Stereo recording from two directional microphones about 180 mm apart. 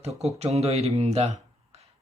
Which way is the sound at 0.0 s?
35° right (ahead or behind).